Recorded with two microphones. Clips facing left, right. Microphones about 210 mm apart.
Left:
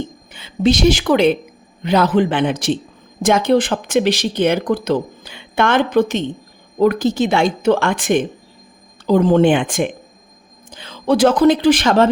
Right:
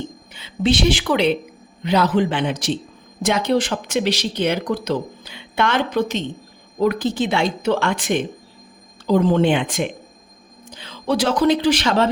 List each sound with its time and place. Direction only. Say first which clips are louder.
0.3 s a woman's voice: left 3 dB; 40° left (ahead or behind)